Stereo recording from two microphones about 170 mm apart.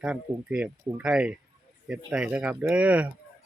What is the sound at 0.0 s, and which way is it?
Speech, 5° right (ahead or behind).